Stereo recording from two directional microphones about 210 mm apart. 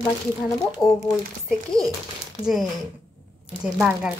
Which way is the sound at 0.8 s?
20° left (ahead or behind).